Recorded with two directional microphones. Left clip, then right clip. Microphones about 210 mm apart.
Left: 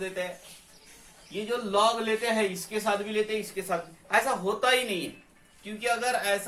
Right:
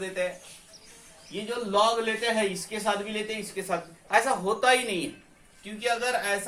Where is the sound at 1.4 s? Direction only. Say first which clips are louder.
Right 1 dB; 20° right (ahead or behind).